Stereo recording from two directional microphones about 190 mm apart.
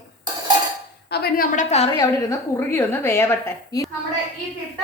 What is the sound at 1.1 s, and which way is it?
Speech, 55° left (ahead or behind).